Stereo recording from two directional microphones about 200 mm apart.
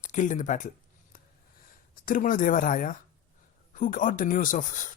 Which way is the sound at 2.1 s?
45° left (ahead or behind).